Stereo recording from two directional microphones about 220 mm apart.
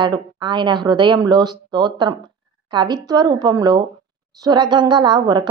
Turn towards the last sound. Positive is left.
turn(degrees=-20)  # may be behind; listen again after turning